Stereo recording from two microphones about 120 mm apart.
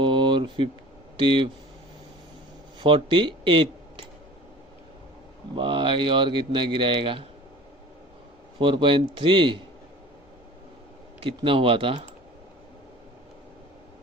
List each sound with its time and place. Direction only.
0.0 s a sound: 40° right (ahead or behind)
1.1 s speech: 45° right (ahead or behind)
2.8 s speech: 45° right (ahead or behind)
5.5 s a man's voice: 45° right (ahead or behind)
8.5 s a man's voice: 45° right (ahead or behind)
11.2 s a man's voice: 45° right (ahead or behind)